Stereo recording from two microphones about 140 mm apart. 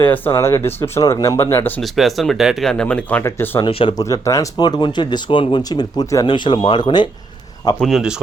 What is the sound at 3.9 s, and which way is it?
Speech, 25° left (ahead or behind).